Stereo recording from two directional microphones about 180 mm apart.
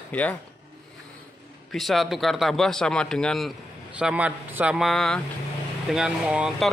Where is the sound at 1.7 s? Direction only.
Centre (ahead or behind).